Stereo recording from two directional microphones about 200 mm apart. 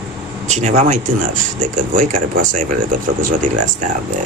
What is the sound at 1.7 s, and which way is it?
Speech, 40° right (ahead or behind).